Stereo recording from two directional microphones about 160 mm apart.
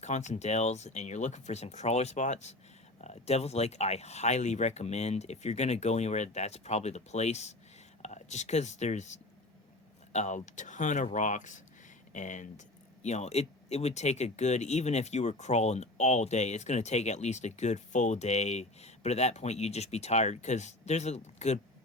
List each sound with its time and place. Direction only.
0.0 s speech: 45° left (ahead or behind)